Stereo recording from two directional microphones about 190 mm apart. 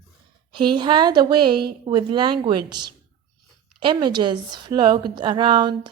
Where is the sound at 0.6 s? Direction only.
25° right (ahead or behind).